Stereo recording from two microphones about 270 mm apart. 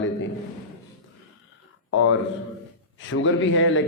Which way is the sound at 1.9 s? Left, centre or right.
Left.